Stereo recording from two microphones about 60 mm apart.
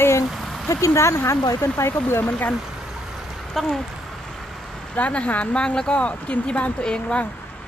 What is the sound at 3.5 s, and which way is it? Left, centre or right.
Speech, centre.